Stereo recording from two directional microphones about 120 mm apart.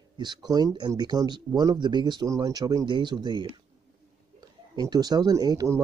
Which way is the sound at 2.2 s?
25° right (ahead or behind).